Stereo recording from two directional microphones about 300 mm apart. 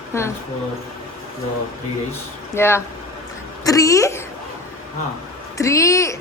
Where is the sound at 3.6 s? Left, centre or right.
Centre.